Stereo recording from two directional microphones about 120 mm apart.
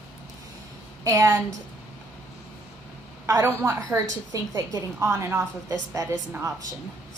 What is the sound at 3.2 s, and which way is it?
Speech, 25° right (ahead or behind).